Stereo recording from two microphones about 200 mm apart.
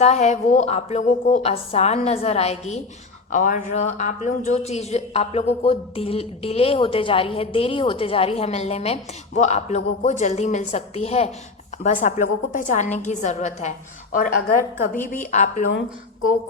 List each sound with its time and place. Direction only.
0.0 s a man's voice: 35° left (ahead or behind)